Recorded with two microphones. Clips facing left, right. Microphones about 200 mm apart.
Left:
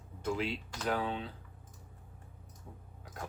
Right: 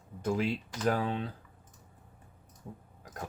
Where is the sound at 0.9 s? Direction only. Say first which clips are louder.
Right 4 dB; 45° right (ahead or behind).